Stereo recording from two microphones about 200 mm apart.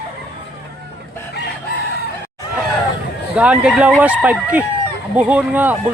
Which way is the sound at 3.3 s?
5° right (ahead or behind).